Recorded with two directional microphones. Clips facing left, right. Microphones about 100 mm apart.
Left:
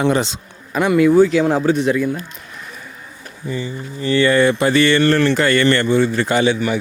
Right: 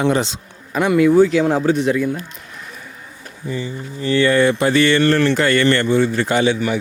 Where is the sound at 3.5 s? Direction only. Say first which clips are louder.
Even; 25° left (ahead or behind).